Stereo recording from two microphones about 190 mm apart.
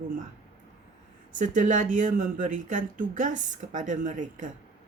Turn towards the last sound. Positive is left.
turn(degrees=-40)  # may be behind; listen again after turning